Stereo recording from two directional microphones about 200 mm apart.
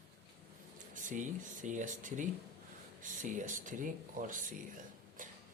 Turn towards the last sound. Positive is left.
turn(degrees=-40)  # may be behind; listen again after turning